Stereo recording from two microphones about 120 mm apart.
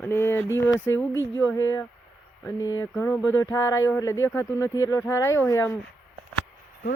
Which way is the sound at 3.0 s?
15° left (ahead or behind).